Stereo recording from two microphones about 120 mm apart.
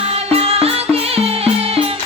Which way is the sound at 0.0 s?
55° right (ahead or behind).